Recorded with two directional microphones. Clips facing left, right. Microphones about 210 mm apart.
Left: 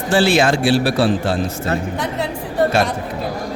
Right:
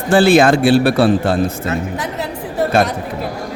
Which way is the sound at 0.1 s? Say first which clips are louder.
Right 5 dB; 55° right (ahead or behind).